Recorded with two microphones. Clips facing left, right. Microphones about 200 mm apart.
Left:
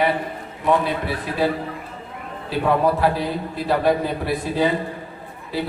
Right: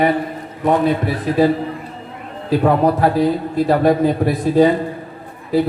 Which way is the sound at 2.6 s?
45° right (ahead or behind).